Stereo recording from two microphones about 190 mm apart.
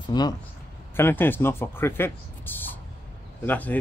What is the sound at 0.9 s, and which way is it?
Speech, 10° left (ahead or behind).